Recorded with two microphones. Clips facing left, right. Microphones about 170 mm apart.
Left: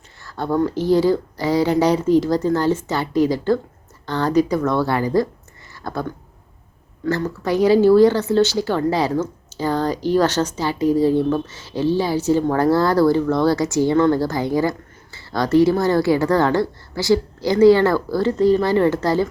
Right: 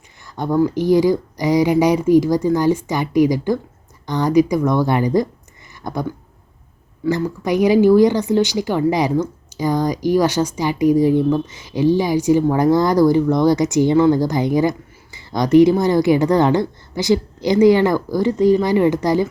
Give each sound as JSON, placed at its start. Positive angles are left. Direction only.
{"t": 0.2, "sound": "speech", "side_deg": -15}